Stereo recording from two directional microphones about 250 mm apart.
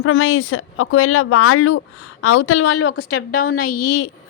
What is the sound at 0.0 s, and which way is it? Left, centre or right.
A woman's voice, left.